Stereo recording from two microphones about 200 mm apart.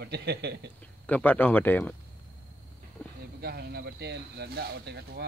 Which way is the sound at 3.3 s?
50° right (ahead or behind).